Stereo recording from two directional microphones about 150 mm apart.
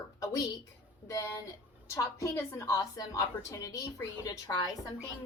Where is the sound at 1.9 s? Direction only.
20° left (ahead or behind).